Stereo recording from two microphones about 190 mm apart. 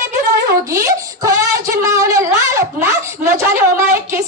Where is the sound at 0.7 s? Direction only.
15° right (ahead or behind).